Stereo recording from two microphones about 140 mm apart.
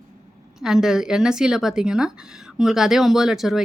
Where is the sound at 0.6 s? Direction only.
5° right (ahead or behind).